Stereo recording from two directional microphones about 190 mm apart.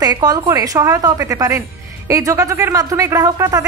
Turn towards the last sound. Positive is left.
turn(degrees=-15)  # may be behind; listen again after turning